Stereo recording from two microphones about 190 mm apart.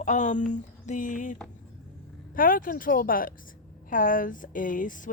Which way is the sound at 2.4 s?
45° left (ahead or behind).